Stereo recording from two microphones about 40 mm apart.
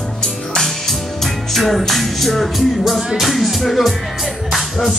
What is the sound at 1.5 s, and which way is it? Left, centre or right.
Music, centre.